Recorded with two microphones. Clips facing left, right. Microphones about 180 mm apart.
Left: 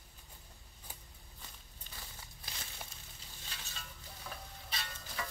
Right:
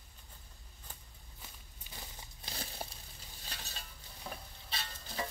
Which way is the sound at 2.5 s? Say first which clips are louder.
Right 7 dB; 35° right (ahead or behind).